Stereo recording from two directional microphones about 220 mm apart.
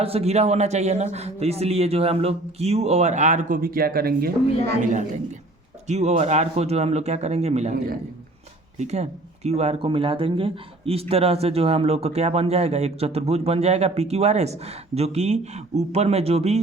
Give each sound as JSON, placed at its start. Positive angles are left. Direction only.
{"t": 0.0, "sound": "a woman's voice", "side_deg": -25}
{"t": 8.8, "sound": "speech", "side_deg": -30}